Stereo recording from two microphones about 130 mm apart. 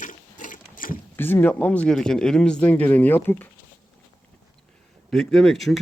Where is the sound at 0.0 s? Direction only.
85° left.